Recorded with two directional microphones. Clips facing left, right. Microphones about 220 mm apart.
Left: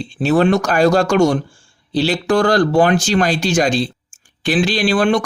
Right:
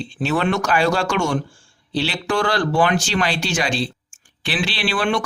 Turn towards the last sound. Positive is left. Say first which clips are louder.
# left 7 dB
turn(degrees=45)  # may be behind; listen again after turning